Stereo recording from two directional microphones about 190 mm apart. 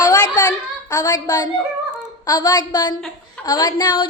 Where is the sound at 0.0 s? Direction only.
20° left (ahead or behind).